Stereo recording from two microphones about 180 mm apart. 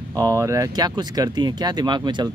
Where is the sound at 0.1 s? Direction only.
20° right (ahead or behind).